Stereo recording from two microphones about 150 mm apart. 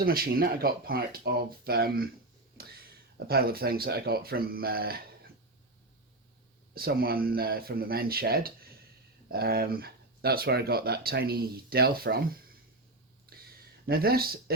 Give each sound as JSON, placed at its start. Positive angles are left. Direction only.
{"t": 0.0, "sound": "speech", "side_deg": -80}
{"t": 6.7, "sound": "speech", "side_deg": -90}
{"t": 13.8, "sound": "speech", "side_deg": -90}